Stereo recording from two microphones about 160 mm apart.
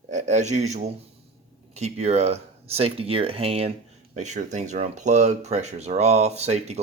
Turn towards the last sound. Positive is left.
turn(degrees=-40)  # may be behind; listen again after turning